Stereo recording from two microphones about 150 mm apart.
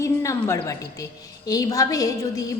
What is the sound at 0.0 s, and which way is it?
A woman's voice, 20° left (ahead or behind).